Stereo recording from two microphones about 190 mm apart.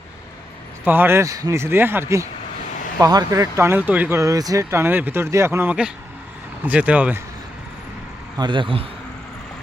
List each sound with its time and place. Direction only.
0.9 s speech: 10° right (ahead or behind)
8.4 s a man's voice: 25° right (ahead or behind)